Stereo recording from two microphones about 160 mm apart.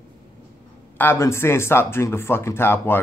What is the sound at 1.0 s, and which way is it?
Speech, 15° left (ahead or behind).